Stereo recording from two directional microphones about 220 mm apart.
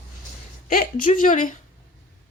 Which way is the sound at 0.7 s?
40° left (ahead or behind).